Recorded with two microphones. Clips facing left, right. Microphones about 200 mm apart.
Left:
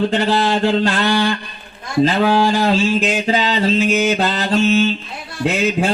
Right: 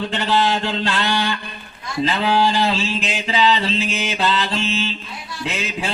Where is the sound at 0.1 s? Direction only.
40° left (ahead or behind).